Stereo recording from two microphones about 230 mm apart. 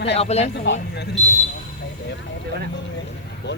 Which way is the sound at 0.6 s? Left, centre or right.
Left.